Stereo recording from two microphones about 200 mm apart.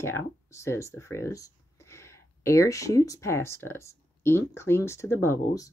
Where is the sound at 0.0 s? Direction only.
15° left (ahead or behind).